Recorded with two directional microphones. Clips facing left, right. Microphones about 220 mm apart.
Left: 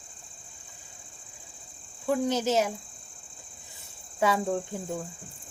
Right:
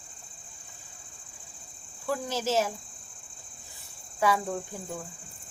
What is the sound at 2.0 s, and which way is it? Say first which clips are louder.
Speech: left 4 dB; 20° left (ahead or behind).